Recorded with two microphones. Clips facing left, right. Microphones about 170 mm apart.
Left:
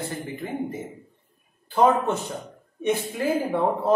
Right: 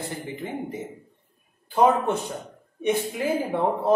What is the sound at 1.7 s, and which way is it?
A man's voice, 10° right (ahead or behind).